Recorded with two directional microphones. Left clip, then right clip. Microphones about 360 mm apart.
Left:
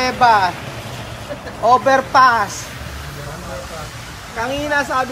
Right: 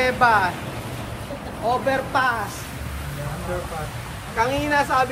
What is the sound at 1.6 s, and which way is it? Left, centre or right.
Speech, centre.